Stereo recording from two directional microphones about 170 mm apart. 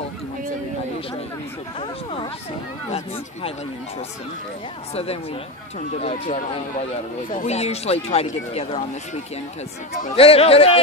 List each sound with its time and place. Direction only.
4.9 s speech: 35° left (ahead or behind)